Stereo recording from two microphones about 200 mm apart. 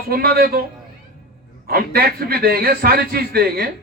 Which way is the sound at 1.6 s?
50° right (ahead or behind).